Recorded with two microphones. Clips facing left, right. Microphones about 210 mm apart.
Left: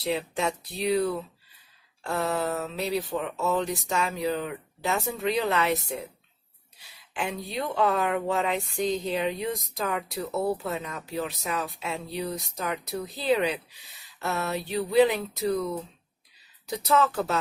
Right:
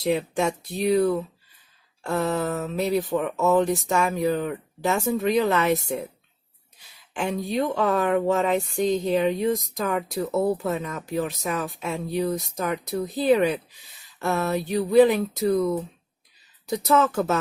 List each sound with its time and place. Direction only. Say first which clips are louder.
0.0 s speech: right 5 dB; 50° right (ahead or behind)
2.2 s speech: right 1 dB; 50° right (ahead or behind)
16.6 s speech: right 3 dB; 45° right (ahead or behind)